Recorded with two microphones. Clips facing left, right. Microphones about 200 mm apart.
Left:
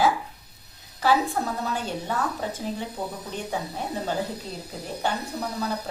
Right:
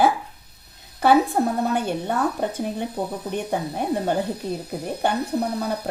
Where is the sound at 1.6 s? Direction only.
55° right (ahead or behind).